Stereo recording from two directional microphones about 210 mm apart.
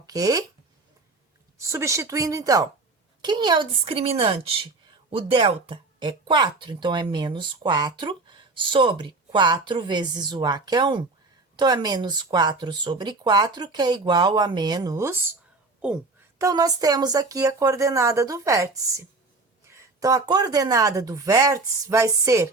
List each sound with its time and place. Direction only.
0.0 s speech: 15° right (ahead or behind)
1.5 s speech: 15° right (ahead or behind)
16.4 s speech: 15° right (ahead or behind)
19.7 s speech: 15° right (ahead or behind)